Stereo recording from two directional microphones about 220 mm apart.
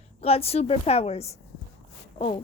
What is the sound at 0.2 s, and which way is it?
Speech, 25° left (ahead or behind).